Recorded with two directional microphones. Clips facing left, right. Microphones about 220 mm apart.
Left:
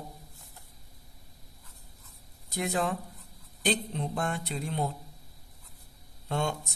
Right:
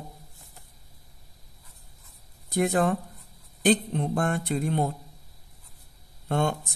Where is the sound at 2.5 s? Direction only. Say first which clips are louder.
Right 7 dB; 50° right (ahead or behind).